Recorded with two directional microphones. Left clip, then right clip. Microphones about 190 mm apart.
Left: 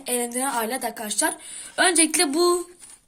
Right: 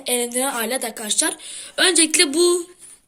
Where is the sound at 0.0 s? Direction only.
45° left (ahead or behind).